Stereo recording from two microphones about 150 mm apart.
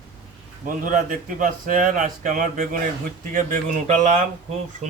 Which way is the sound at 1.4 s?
60° right (ahead or behind).